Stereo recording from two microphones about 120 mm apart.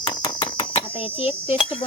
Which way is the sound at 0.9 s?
55° left (ahead or behind).